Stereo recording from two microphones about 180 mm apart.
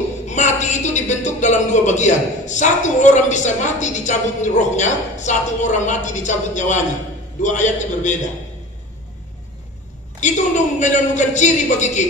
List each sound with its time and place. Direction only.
0.3 s a man's voice: 40° left (ahead or behind)
10.2 s speech: 40° left (ahead or behind)